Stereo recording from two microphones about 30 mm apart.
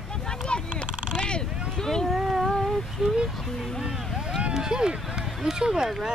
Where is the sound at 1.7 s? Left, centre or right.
Centre.